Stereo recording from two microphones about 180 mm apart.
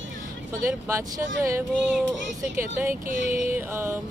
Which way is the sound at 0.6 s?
15° right (ahead or behind).